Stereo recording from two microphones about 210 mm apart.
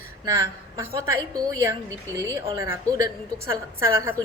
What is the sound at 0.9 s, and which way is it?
Speech, 15° right (ahead or behind).